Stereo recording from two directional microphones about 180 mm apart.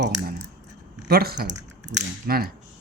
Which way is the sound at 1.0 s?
60° right (ahead or behind).